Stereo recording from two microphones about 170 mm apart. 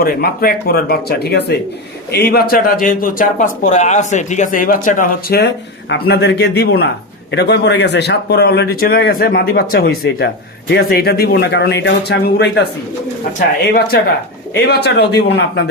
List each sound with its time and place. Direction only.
0.0 s a man's voice: 65° left (ahead or behind)
5.4 s speech: 85° left
13.6 s speech: 65° left (ahead or behind); by 15.7 s 85° left